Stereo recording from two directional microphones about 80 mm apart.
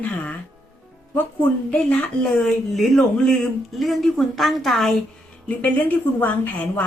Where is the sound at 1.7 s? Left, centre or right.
Centre.